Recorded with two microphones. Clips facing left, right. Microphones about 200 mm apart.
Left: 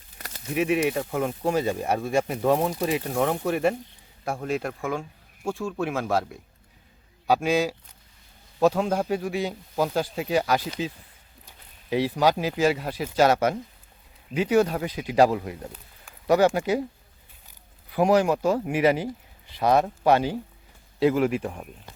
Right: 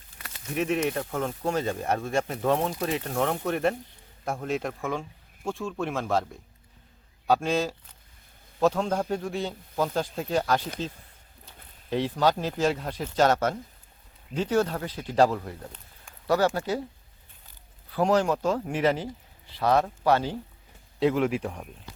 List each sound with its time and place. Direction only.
0.5 s speech: 10° left (ahead or behind)
17.9 s speech: 10° left (ahead or behind)